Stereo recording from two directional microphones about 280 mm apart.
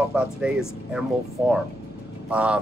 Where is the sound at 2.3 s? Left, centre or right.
Centre.